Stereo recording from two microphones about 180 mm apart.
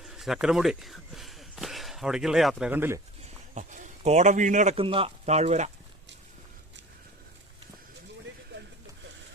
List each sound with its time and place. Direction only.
0.0 s speech: centre (ahead or behind)
3.5 s speech: 45° right (ahead or behind)